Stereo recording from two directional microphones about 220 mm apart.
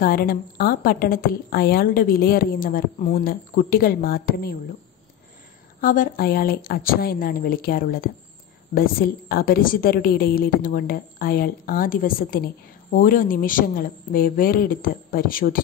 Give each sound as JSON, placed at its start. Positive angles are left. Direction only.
{"t": 0.0, "sound": "a woman's voice", "side_deg": 40}
{"t": 5.8, "sound": "a woman's voice", "side_deg": 40}